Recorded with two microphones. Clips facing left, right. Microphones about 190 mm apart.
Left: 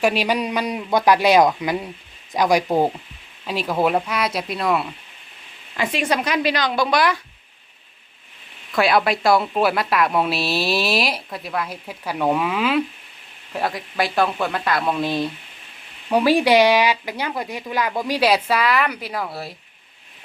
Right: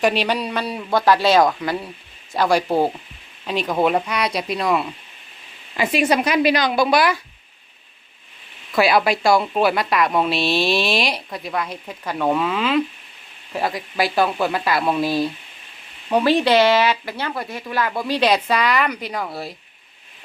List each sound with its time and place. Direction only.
0.0 s a woman's voice: 10° left (ahead or behind)
8.7 s a woman's voice: centre (ahead or behind)
16.0 s speech: 10° left (ahead or behind)